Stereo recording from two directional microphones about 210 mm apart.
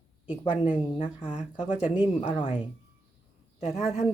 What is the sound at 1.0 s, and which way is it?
Speech, 20° left (ahead or behind).